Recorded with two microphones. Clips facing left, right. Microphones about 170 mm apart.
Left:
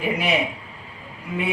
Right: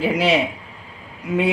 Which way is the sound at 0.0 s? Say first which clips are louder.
Right 5 dB; 90° right.